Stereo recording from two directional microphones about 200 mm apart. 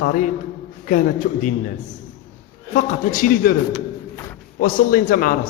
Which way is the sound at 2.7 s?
40° left (ahead or behind).